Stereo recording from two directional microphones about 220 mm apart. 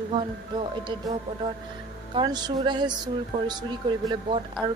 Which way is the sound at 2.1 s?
20° right (ahead or behind).